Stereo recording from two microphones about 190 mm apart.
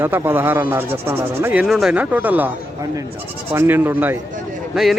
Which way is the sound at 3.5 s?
10° right (ahead or behind).